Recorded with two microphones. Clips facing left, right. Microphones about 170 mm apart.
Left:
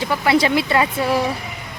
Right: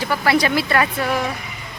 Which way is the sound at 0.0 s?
20° left (ahead or behind).